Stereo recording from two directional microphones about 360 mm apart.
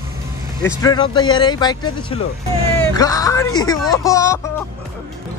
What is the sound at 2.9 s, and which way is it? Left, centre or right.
Speech, centre.